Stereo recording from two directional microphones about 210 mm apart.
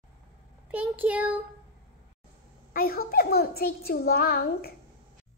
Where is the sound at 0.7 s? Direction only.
10° right (ahead or behind).